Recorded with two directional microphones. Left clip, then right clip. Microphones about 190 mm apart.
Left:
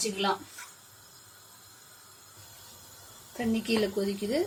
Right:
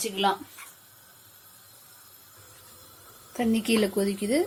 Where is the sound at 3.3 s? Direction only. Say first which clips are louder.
Right 4 dB; 30° right (ahead or behind).